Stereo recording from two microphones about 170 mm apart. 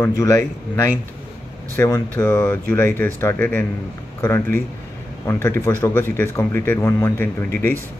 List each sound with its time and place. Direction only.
0.0 s speech: 15° left (ahead or behind)